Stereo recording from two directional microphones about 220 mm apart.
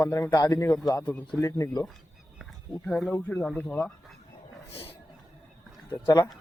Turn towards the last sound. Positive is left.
turn(degrees=15)  # may be behind; listen again after turning